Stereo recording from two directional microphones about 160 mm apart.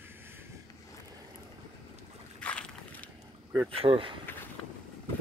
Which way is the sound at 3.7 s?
35° right (ahead or behind).